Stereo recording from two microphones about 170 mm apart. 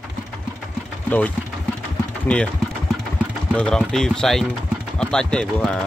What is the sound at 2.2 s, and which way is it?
Speech, 5° left (ahead or behind).